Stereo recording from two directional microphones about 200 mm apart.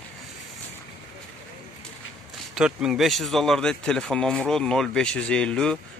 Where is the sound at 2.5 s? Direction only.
5° right (ahead or behind).